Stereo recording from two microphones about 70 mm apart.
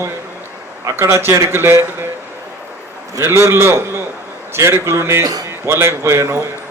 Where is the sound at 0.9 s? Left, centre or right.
Right.